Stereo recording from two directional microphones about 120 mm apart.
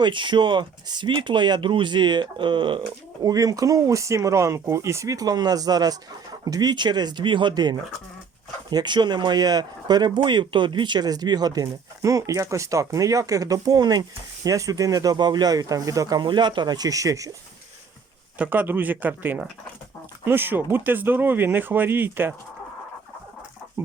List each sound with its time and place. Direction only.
0.0 s speech: 40° right (ahead or behind)
3.2 s speech: 30° right (ahead or behind)
18.3 s speech: 15° right (ahead or behind)